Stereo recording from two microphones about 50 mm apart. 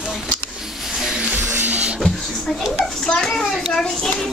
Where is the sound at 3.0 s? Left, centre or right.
Centre.